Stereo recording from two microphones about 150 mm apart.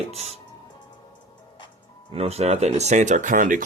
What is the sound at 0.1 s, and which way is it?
Music, 45° right (ahead or behind).